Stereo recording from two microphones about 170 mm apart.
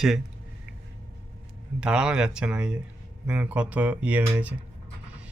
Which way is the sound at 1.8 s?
5° right (ahead or behind).